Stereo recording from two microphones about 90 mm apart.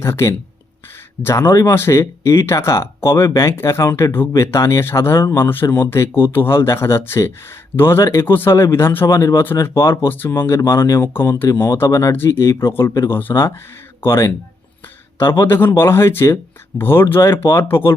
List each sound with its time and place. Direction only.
0.0 s speech: 30° left (ahead or behind)
4.4 s speech: 35° left (ahead or behind)
9.0 s speech: 35° left (ahead or behind)